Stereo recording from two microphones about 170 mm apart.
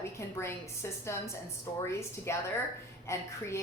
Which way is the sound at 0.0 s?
15° left (ahead or behind).